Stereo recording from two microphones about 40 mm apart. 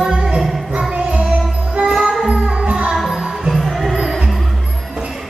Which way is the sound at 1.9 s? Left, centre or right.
Centre.